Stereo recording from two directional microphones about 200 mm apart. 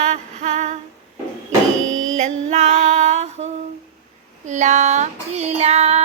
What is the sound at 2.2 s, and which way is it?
Female singing, 35° right (ahead or behind).